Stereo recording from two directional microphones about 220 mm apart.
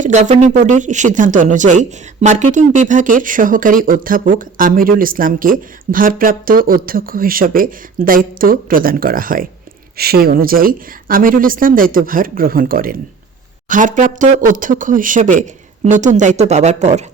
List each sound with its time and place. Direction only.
0.0 s speech: 35° right (ahead or behind)